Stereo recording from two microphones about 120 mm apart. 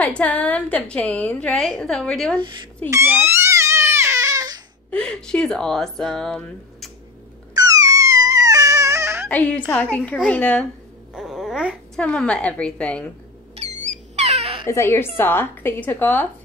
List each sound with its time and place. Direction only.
0.0 s a woman's voice: 10° left (ahead or behind)
2.9 s crying: 20° right (ahead or behind)
4.9 s speech: 5° left (ahead or behind)
7.5 s a sound: 30° right (ahead or behind)
9.3 s a woman's voice: 10° left (ahead or behind)
11.1 s babbling: 5° right (ahead or behind)
12.0 s a woman's voice: 10° left (ahead or behind)
13.6 s a sound: 60° right (ahead or behind)
14.7 s a woman's voice: 25° left (ahead or behind)